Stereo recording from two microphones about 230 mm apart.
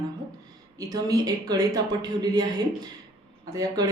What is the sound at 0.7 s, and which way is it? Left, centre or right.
A woman's voice, centre.